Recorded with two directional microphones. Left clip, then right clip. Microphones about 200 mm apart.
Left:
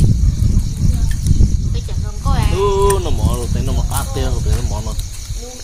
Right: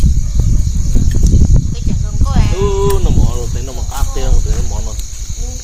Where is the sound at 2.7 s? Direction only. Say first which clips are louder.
Left 1 dB; 30° left (ahead or behind).